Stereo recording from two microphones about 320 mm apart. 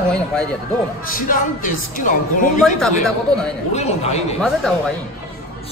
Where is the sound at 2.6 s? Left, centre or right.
Centre.